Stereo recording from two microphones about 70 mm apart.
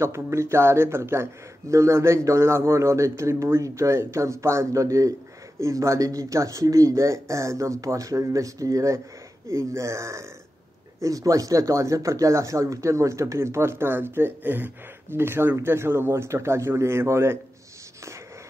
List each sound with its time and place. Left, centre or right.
0.0 s speech: right
11.0 s speech: right